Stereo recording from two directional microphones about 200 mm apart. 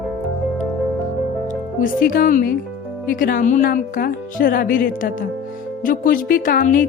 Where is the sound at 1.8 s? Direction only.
45° left (ahead or behind).